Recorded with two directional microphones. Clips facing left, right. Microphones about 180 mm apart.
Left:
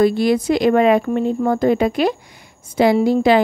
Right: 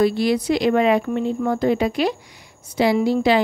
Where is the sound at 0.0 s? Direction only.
50° left (ahead or behind).